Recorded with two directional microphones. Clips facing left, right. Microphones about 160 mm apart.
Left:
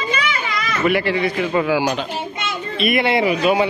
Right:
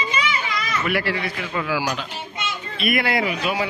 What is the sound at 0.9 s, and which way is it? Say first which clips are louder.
Speech: left 7 dB; 20° left (ahead or behind).